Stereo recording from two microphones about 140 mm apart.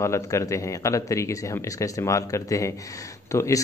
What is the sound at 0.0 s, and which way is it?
Speech, 20° left (ahead or behind).